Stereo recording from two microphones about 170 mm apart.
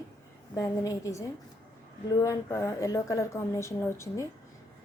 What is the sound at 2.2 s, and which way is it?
A woman's voice, 20° left (ahead or behind).